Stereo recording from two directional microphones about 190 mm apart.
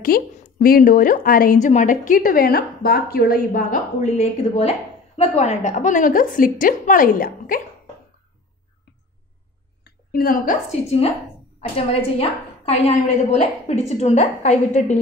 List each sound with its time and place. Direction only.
0.0 s a woman's voice: 50° left (ahead or behind)
9.8 s a woman's voice: 50° left (ahead or behind)